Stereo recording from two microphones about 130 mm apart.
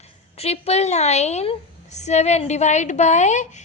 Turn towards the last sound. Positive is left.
turn(degrees=65)  # may be behind; listen again after turning